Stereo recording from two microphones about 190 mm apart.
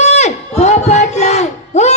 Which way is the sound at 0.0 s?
35° left (ahead or behind).